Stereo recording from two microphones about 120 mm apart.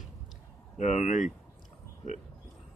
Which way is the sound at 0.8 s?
80° left.